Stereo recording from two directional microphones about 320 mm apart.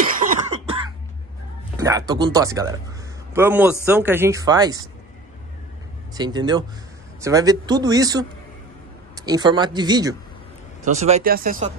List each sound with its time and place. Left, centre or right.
0.1 s cough: right
1.8 s a man's voice: centre
6.1 s a man's voice: centre